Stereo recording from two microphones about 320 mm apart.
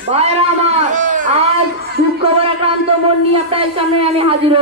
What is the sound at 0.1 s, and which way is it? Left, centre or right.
Speech, centre.